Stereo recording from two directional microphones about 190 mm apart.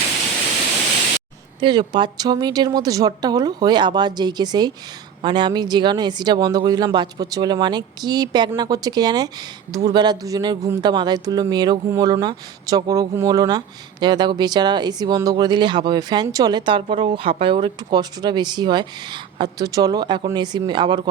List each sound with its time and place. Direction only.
1.6 s speech: 25° right (ahead or behind)